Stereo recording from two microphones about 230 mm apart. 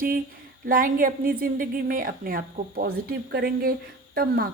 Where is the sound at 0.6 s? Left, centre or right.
Right.